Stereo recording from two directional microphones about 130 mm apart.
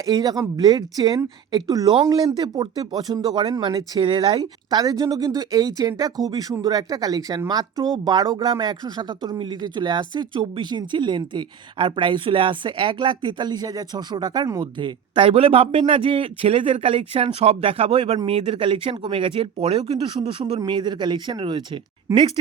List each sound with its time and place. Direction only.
0.0 s speech: 30° right (ahead or behind)